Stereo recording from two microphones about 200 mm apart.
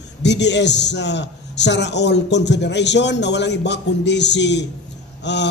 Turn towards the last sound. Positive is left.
turn(degrees=60)  # may be behind; listen again after turning